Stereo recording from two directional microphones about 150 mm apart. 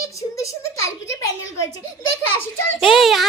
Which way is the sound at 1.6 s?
20° left (ahead or behind).